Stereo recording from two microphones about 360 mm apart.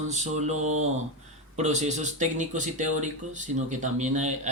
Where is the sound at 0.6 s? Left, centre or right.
Right.